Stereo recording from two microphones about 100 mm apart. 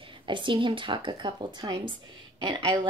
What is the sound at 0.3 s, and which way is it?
A woman's voice, 55° right (ahead or behind).